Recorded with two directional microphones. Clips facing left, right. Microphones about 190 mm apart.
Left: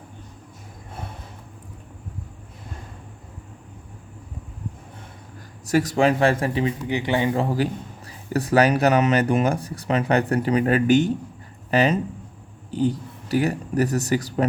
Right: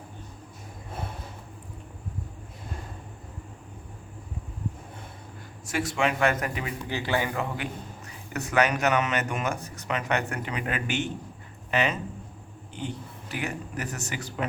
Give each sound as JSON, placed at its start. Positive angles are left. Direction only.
{"t": 5.6, "sound": "speech", "side_deg": 40}
{"t": 7.4, "sound": "a man's voice", "side_deg": 35}